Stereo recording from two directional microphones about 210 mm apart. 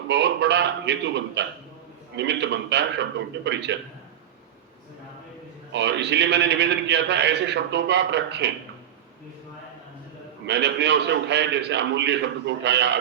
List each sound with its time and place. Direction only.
0.1 s a man's voice: 55° right (ahead or behind)
5.7 s a man's voice: 55° right (ahead or behind)
10.4 s a man's voice: 55° right (ahead or behind)